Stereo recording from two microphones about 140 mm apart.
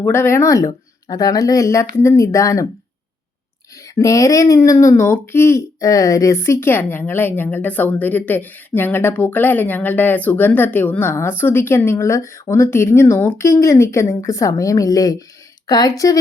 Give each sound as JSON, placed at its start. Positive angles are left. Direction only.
{"t": 0.0, "sound": "speech", "side_deg": 15}
{"t": 3.9, "sound": "speech", "side_deg": 25}